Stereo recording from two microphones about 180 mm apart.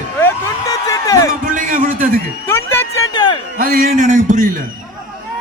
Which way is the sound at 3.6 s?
50° right (ahead or behind).